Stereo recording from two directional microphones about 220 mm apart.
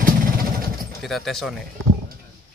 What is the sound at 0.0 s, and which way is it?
Vehicle, 40° right (ahead or behind).